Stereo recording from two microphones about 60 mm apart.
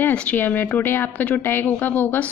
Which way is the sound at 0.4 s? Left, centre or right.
Left.